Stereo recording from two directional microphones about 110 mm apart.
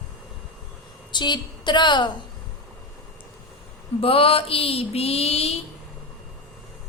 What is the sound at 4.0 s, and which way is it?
Speech, 60° left (ahead or behind).